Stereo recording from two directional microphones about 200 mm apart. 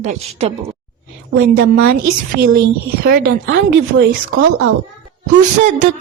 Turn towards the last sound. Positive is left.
turn(degrees=-40)  # may be behind; listen again after turning